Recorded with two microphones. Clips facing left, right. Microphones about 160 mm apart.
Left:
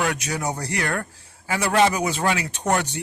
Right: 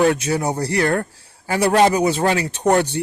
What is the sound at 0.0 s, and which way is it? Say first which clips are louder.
Speech: right 8 dB; 30° right (ahead or behind).